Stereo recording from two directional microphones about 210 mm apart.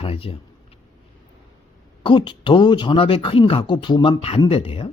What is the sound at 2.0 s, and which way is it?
Speech, 25° left (ahead or behind).